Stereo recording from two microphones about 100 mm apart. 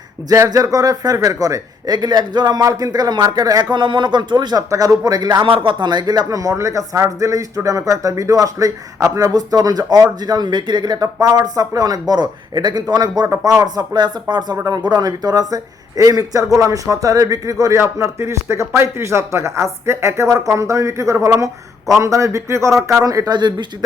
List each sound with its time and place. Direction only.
0.3 s a man's voice: 35° right (ahead or behind)
5.5 s a man's voice: 50° right (ahead or behind)
14.5 s a man's voice: 35° right (ahead or behind)
23.3 s speech: 45° right (ahead or behind)